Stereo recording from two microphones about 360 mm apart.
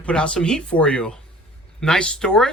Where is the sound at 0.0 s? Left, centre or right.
Centre.